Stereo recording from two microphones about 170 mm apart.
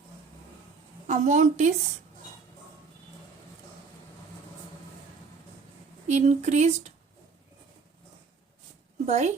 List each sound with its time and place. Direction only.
1.0 s a woman's voice: 45° right (ahead or behind)
6.1 s speech: 40° right (ahead or behind)
9.0 s speech: 40° right (ahead or behind)